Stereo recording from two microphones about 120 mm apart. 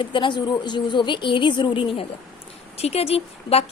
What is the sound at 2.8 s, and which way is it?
Speech, 60° left (ahead or behind).